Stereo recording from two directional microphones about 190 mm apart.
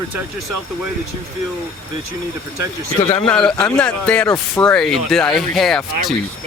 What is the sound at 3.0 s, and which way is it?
Speech, 30° left (ahead or behind).